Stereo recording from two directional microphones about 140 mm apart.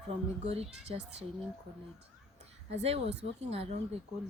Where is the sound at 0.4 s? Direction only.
50° right (ahead or behind).